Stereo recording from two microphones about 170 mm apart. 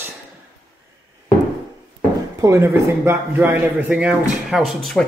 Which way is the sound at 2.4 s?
15° right (ahead or behind).